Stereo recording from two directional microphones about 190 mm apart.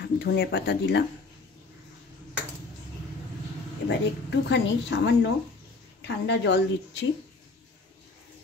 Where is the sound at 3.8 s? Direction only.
70° left (ahead or behind).